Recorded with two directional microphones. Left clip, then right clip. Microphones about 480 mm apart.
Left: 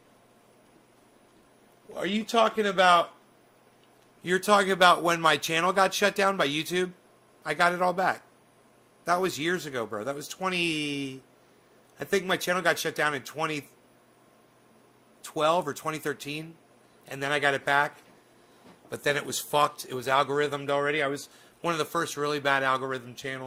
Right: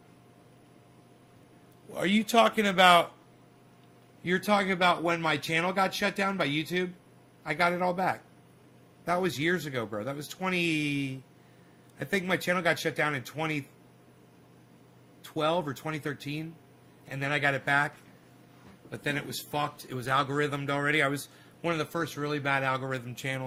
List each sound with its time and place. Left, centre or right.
1.9 s speech: centre
4.2 s speech: left
15.2 s speech: left
18.9 s speech: left
19.9 s speech: left
21.6 s speech: left